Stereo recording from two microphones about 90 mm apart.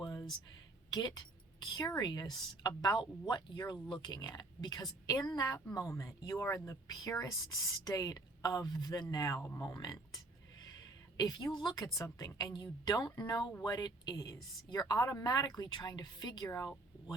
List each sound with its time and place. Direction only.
0.0 s a sound: 50° left (ahead or behind)
0.9 s a woman's voice: 50° left (ahead or behind)
11.2 s speech: 50° left (ahead or behind)